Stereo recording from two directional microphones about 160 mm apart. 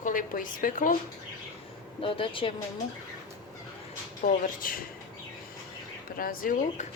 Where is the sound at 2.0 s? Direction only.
35° left (ahead or behind).